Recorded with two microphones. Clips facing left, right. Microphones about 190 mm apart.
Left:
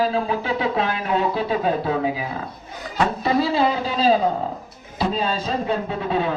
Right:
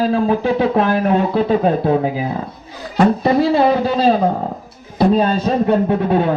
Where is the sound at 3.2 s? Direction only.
55° right (ahead or behind).